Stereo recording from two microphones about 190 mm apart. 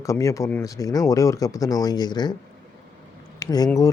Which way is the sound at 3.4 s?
20° left (ahead or behind).